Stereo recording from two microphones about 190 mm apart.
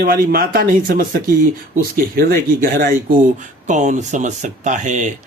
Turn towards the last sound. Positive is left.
turn(degrees=-40)  # may be behind; listen again after turning